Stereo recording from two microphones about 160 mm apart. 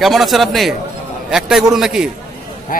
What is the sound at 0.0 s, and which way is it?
A man's voice, centre (ahead or behind).